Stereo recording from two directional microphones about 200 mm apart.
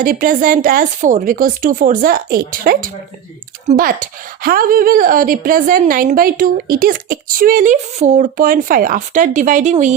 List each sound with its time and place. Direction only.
0.0 s a woman's voice: 45° right (ahead or behind)